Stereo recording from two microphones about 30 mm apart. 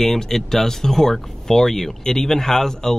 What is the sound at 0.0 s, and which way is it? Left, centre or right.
Speech, centre.